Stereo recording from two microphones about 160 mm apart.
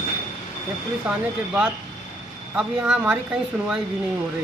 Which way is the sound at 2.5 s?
5° right (ahead or behind).